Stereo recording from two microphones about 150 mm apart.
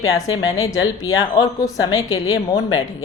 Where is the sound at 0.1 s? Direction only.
20° left (ahead or behind).